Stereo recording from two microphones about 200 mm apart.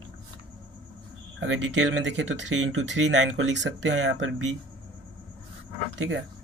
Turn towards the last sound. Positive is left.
turn(degrees=-70)  # may be behind; listen again after turning